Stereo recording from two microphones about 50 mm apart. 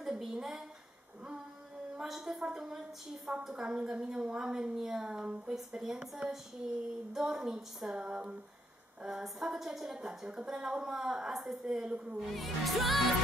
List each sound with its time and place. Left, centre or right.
0.0 s a woman's voice: centre
2.0 s a woman's voice: centre